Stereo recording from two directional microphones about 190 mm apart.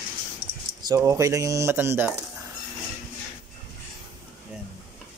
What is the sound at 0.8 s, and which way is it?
Speech, 15° right (ahead or behind).